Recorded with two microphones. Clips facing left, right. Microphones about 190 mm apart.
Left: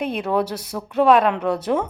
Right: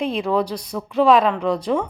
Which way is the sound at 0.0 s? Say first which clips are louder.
Right 1 dB; centre (ahead or behind).